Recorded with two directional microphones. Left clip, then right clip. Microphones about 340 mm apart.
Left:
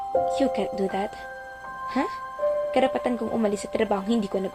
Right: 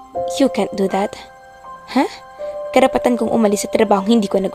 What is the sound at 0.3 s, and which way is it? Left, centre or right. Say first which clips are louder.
Speech: right 7 dB; right.